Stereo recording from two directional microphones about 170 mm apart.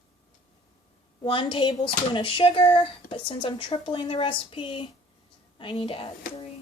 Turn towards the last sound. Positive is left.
turn(degrees=30)  # may be behind; listen again after turning